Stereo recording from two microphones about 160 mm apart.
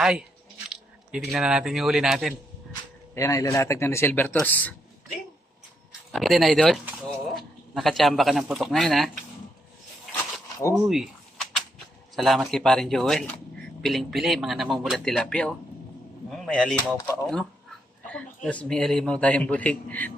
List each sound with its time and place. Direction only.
0.0 s speech: 5° right (ahead or behind)
3.2 s a man's voice: 20° left (ahead or behind)
6.1 s speech: centre (ahead or behind)
10.8 s a sound: centre (ahead or behind)
12.1 s speech: centre (ahead or behind)
18.1 s a man's voice: 10° left (ahead or behind)